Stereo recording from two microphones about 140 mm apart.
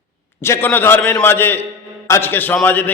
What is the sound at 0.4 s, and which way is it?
A man's voice, 15° left (ahead or behind).